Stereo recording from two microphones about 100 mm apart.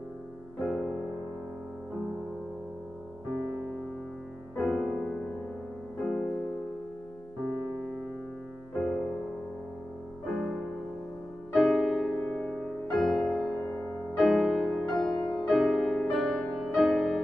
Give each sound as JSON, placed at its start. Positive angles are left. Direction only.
{"t": 0.6, "sound": "music", "side_deg": 0}
{"t": 4.6, "sound": "music", "side_deg": 0}
{"t": 8.7, "sound": "music", "side_deg": 0}
{"t": 10.2, "sound": "music", "side_deg": 0}